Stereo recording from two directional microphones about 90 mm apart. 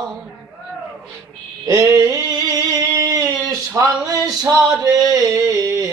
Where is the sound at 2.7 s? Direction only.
45° right (ahead or behind).